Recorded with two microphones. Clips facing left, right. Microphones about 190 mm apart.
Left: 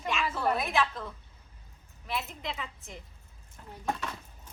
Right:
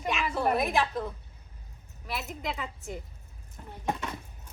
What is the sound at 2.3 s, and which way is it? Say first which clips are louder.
Speech: right 3 dB; 40° right (ahead or behind).